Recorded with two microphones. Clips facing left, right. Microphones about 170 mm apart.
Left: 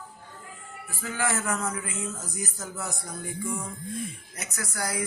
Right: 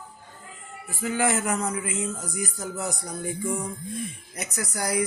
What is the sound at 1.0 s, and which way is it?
Speech, 20° right (ahead or behind).